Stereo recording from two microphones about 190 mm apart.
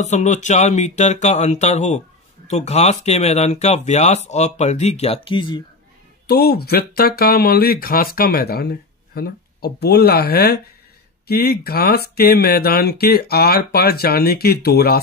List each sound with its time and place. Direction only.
0.0 s speech: 40° left (ahead or behind)
6.2 s speech: 55° left (ahead or behind)